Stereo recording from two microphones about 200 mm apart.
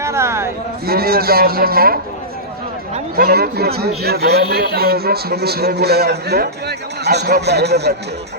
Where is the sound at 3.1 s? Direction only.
50° right (ahead or behind).